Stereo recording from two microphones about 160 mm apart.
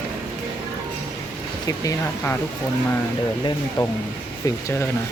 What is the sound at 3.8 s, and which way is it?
Speech, 30° left (ahead or behind).